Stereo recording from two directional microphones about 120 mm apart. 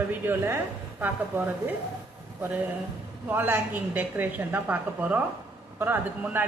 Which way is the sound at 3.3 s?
15° right (ahead or behind).